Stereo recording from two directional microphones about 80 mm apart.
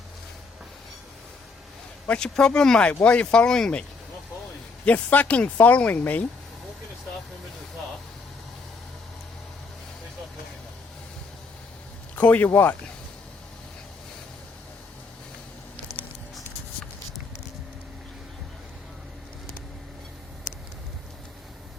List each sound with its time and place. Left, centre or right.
2.0 s speech: centre
4.9 s speech: centre
12.1 s speech: centre
15.9 s patter: right